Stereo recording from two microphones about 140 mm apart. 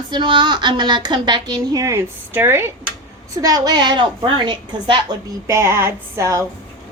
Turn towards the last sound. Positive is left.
turn(degrees=-20)  # may be behind; listen again after turning